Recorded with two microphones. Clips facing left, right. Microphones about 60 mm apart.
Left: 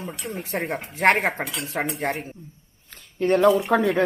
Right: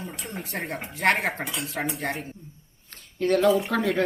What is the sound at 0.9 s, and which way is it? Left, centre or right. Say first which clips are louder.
Speech: left 4 dB; left.